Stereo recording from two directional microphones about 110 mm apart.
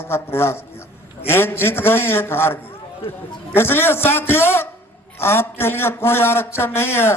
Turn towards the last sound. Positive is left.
turn(degrees=20)  # may be behind; listen again after turning